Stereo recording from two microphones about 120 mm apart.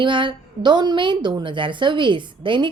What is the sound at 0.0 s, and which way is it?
A woman's voice, 45° right (ahead or behind).